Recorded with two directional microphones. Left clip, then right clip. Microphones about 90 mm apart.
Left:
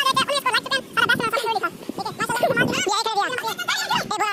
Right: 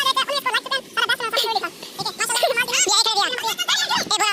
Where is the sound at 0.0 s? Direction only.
5° left (ahead or behind).